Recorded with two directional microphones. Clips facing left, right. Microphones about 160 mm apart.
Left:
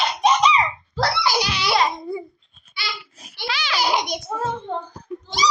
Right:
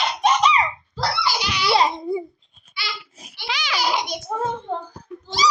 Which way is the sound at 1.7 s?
30° right (ahead or behind).